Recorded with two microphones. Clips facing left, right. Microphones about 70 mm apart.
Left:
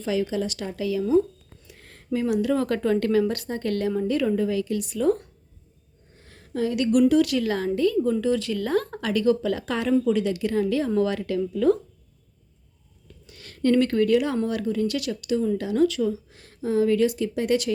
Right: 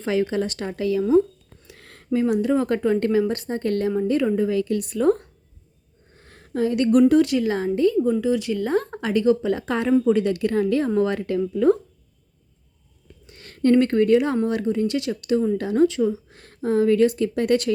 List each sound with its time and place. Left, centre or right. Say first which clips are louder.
0.0 s speech: right 3 dB; right
1.6 s a sound: right 3 dB; right
2.1 s speech: right 3 dB; right
4.5 s speech: right 3 dB; right
6.1 s a sound: right 3 dB; right
7.1 s speech: right 3 dB; right
8.1 s speech: right 2 dB; centre
10.2 s speech: right 3 dB; right
13.2 s speech: right 3 dB; right
16.3 s a woman's voice: right 3 dB; right